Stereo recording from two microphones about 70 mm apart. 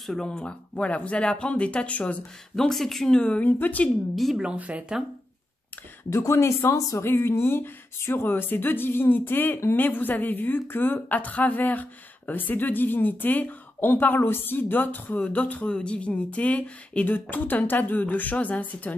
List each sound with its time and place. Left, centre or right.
0.0 s speech: centre
2.5 s speech: centre; by 3.9 s left
4.1 s speech: centre
4.4 s speech: centre
6.0 s speech: left